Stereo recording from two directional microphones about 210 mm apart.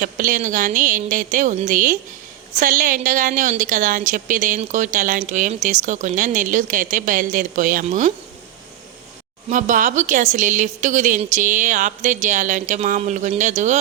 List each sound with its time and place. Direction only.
0.0 s a woman's voice: 40° right (ahead or behind)
9.5 s a woman's voice: 40° right (ahead or behind)